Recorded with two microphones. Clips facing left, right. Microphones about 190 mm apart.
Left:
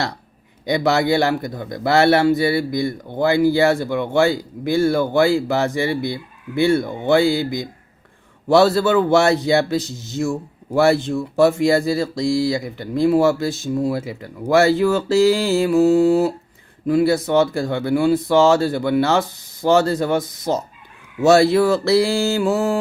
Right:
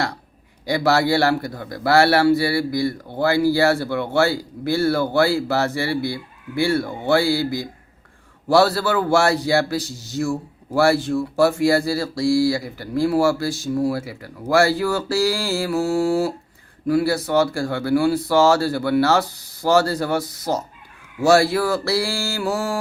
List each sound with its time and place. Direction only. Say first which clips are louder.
0.6 s speech: left 1 dB; 20° left (ahead or behind)